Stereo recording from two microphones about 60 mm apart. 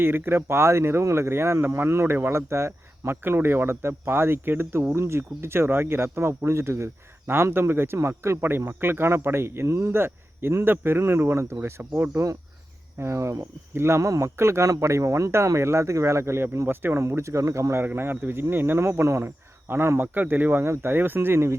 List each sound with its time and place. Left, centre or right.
0.0 s speech: right
4.9 s speech: right
11.8 s speech: right
13.0 s speech: right
14.0 s speech: right
14.3 s speech: right
17.8 s speech: right